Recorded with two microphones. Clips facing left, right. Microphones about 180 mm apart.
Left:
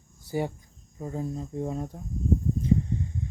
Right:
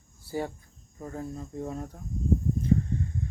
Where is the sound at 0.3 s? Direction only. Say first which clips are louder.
Left 3 dB; 15° left (ahead or behind).